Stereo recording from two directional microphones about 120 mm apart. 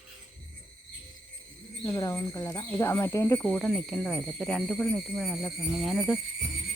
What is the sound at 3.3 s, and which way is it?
Speech, 10° left (ahead or behind).